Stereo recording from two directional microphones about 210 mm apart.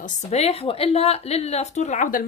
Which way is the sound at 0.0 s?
30° left (ahead or behind).